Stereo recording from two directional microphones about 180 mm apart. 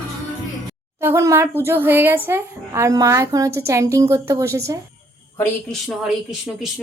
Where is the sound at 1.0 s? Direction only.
15° right (ahead or behind).